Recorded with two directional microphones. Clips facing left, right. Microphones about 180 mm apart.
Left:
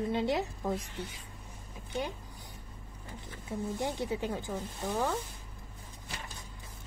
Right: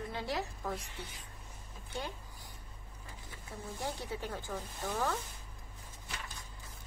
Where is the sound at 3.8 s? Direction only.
20° left (ahead or behind).